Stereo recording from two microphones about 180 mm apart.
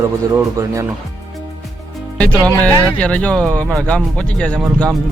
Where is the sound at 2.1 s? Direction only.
5° left (ahead or behind).